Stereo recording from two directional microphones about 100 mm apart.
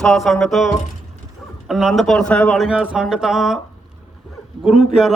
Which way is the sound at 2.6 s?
10° right (ahead or behind).